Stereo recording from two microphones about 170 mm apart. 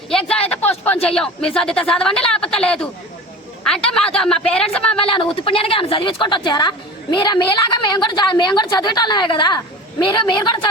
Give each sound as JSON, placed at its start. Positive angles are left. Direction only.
{"t": 0.1, "sound": "speech", "side_deg": 5}
{"t": 0.3, "sound": "speech", "side_deg": 35}
{"t": 1.0, "sound": "speech", "side_deg": 5}
{"t": 3.8, "sound": "speech", "side_deg": 5}
{"t": 5.0, "sound": "a woman's voice", "side_deg": 30}